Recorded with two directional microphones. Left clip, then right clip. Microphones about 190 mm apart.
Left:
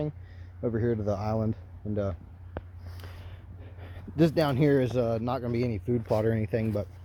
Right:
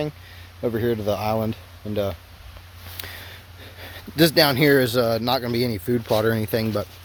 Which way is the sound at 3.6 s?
25° right (ahead or behind).